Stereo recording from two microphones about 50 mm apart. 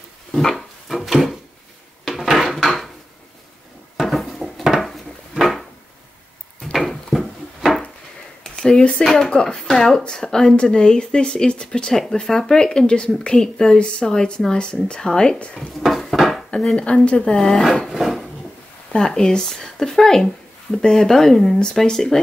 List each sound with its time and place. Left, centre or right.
0.3 s wood: centre
2.0 s dishes: centre
3.9 s a sound: centre
9.0 s speech: centre
9.7 s speech: centre
11.9 s speech: centre
15.8 s cupboard open or close: centre
16.7 s speech: left
17.4 s speech: centre
17.8 s a sound: centre
18.9 s speech: centre